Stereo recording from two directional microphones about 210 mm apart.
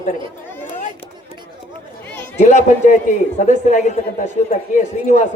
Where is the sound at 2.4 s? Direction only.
35° left (ahead or behind).